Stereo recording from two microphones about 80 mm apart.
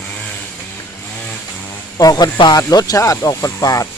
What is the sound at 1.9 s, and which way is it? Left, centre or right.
Speech, left.